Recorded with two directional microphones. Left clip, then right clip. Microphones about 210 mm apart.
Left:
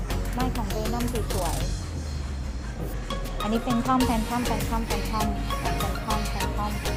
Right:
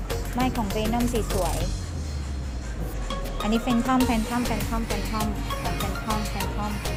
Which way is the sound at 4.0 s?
Centre (ahead or behind).